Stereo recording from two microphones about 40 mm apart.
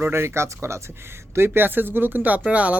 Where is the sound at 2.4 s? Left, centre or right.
Right.